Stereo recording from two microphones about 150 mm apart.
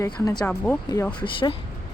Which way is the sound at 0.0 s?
25° left (ahead or behind).